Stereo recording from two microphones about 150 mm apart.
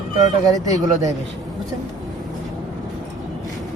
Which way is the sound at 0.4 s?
25° right (ahead or behind).